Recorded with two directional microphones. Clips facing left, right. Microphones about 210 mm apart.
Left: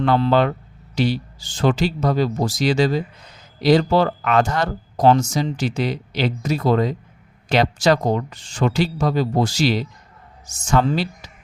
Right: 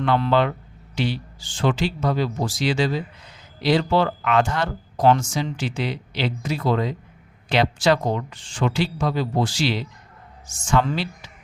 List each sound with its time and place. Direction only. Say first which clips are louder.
0.0 s speech: left 3 dB; 40° left (ahead or behind)